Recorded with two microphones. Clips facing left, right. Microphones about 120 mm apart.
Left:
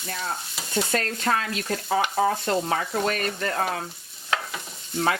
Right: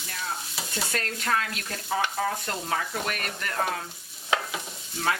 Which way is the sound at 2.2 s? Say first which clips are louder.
Left 7 dB; 30° left (ahead or behind).